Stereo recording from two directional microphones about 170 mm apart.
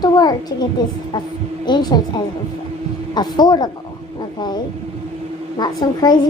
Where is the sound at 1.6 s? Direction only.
25° left (ahead or behind).